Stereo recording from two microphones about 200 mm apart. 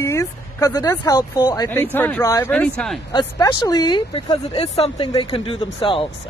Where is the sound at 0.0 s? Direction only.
15° left (ahead or behind).